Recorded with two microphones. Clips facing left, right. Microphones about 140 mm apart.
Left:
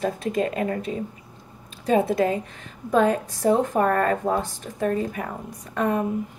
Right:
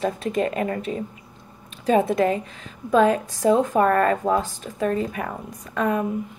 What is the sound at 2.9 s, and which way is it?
Speech, 70° right (ahead or behind).